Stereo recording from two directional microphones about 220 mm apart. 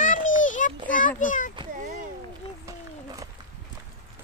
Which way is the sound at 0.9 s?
35° left (ahead or behind).